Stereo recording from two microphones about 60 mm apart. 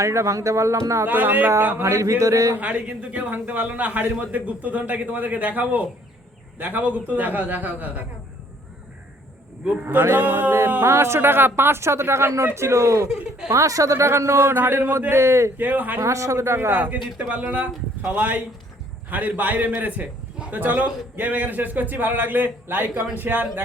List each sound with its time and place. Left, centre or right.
0.0 s speech: right
1.0 s a man's voice: right
1.5 s speech: right
2.6 s a man's voice: right
9.8 s a man's voice: right
10.8 s speech: right
15.5 s a man's voice: right
16.0 s speech: right
16.7 s a man's voice: right